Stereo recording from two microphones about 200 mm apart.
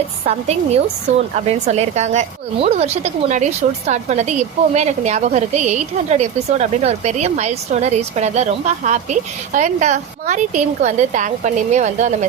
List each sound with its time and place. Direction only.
0.3 s a woman's voice: 30° right (ahead or behind)